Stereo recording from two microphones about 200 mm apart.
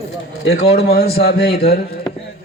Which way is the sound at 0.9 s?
50° left (ahead or behind).